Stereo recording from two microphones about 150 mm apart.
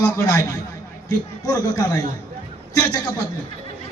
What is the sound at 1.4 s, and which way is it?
Speech, 25° left (ahead or behind).